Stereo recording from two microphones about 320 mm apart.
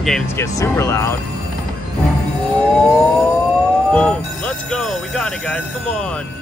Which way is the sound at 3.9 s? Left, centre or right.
Centre.